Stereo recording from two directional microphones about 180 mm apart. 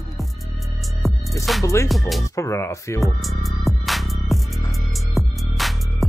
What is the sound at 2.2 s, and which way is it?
Speech, 15° left (ahead or behind).